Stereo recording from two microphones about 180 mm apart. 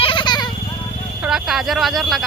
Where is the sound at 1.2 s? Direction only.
Centre (ahead or behind).